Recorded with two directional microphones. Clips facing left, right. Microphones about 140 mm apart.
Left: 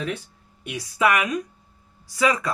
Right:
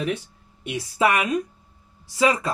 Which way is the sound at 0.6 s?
30° right (ahead or behind).